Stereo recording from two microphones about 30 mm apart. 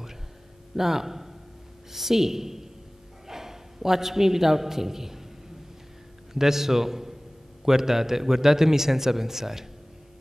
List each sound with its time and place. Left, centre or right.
0.7 s a woman's voice: centre
6.3 s a man's voice: centre